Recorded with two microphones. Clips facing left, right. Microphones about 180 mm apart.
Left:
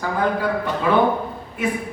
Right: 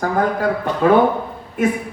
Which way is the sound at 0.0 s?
45° right (ahead or behind).